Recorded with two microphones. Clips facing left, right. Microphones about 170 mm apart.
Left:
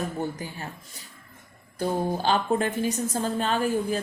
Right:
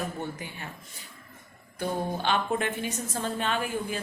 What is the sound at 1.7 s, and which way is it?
A woman's voice, 40° left (ahead or behind).